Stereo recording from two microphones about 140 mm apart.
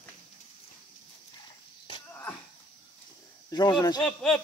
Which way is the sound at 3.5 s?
30° left (ahead or behind).